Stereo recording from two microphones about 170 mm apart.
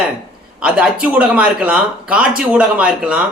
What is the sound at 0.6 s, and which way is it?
Speech, 10° right (ahead or behind).